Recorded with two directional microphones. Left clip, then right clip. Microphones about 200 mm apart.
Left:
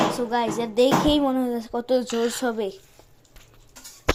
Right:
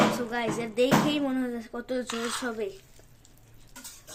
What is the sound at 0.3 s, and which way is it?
Speech, 15° left (ahead or behind).